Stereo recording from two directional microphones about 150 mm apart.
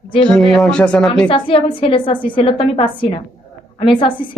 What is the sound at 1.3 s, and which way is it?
A woman's voice, 35° left (ahead or behind).